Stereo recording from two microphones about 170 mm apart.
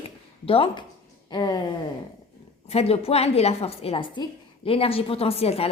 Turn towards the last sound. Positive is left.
turn(degrees=35)  # may be behind; listen again after turning